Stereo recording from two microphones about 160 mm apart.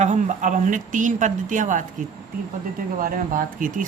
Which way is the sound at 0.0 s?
50° right (ahead or behind).